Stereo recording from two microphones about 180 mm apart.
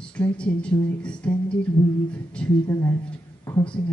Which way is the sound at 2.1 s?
5° left (ahead or behind).